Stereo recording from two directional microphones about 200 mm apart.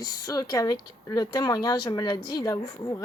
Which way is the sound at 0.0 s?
20° left (ahead or behind).